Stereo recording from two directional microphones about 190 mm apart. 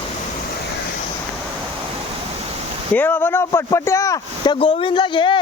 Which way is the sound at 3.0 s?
10° left (ahead or behind).